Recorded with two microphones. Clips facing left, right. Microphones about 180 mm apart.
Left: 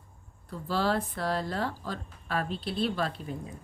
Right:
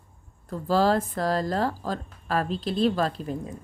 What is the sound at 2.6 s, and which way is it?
Speech, 90° right.